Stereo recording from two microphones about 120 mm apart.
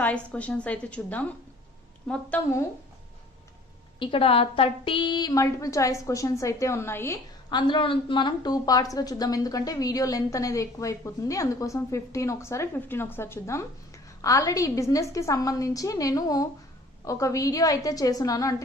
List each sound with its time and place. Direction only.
0.0 s a woman's voice: 10° left (ahead or behind)
4.0 s a woman's voice: 50° left (ahead or behind); by 7.2 s 20° left (ahead or behind)
7.5 s a woman's voice: 45° left (ahead or behind)